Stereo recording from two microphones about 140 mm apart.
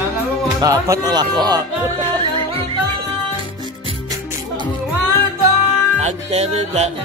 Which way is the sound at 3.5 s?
35° right (ahead or behind).